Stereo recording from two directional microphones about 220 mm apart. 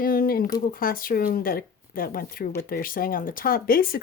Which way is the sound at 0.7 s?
40° left (ahead or behind).